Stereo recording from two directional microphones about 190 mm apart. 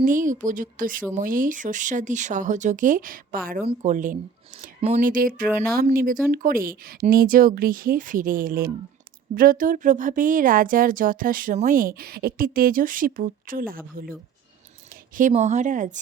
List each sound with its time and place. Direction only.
0.0 s speech: 45° right (ahead or behind)
14.8 s a sound: 45° right (ahead or behind)
15.3 s speech: 35° right (ahead or behind)